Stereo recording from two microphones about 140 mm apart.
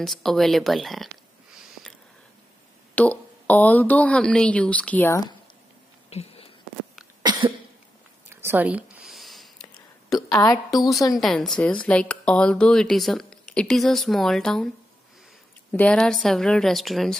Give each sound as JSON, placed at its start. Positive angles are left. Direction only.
{"t": 0.0, "sound": "speech", "side_deg": 0}
{"t": 2.9, "sound": "a woman's voice", "side_deg": 10}
{"t": 6.0, "sound": "a sound", "side_deg": 45}
{"t": 7.2, "sound": "cough", "side_deg": -35}
{"t": 8.3, "sound": "a sound", "side_deg": -15}
{"t": 10.8, "sound": "a woman's voice", "side_deg": 25}
{"t": 11.1, "sound": "speech", "side_deg": 0}
{"t": 15.7, "sound": "speech", "side_deg": 10}